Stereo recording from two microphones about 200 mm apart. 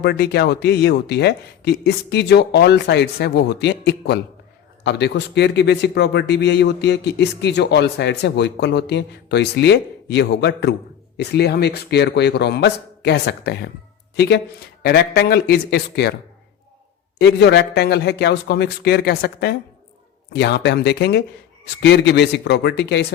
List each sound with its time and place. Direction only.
0.0 s a man's voice: 55° left (ahead or behind)
17.2 s a man's voice: 55° left (ahead or behind)